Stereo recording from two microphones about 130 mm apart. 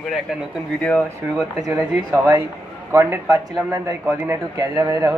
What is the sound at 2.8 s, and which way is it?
A man's voice, 20° right (ahead or behind).